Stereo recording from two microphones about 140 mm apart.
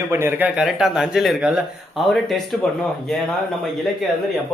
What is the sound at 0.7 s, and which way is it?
Speech, centre (ahead or behind).